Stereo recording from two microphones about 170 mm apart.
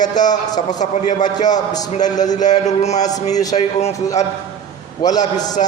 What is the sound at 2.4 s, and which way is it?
A man's voice, 45° left (ahead or behind).